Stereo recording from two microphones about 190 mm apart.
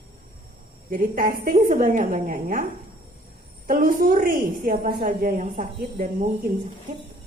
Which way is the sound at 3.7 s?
50° right (ahead or behind).